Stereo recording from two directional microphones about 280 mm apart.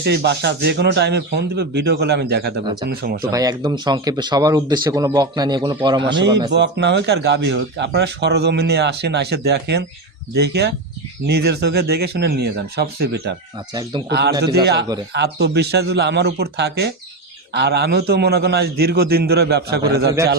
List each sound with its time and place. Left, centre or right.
0.0 s speech: right
3.3 s speech: centre
6.5 s speech: right